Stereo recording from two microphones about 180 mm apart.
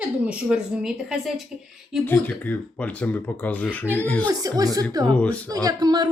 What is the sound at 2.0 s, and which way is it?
Speech, 10° left (ahead or behind).